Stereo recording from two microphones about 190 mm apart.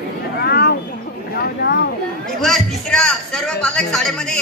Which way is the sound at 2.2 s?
Centre (ahead or behind).